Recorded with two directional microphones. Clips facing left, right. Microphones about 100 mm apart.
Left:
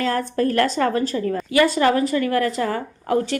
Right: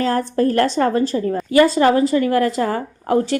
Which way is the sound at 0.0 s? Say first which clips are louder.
Right 3 dB; 30° right (ahead or behind).